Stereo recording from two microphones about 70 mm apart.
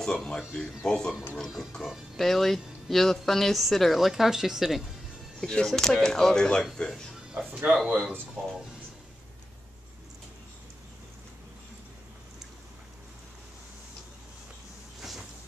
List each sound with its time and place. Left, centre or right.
0.0 s speech: centre
5.4 s speech: centre
7.6 s speech: centre
15.0 s vehicle: centre